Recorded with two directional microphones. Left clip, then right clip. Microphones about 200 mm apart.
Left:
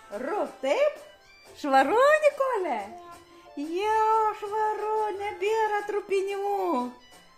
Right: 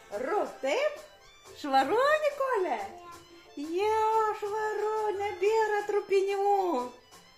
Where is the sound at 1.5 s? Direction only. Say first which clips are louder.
Left 4 dB; 45° left (ahead or behind).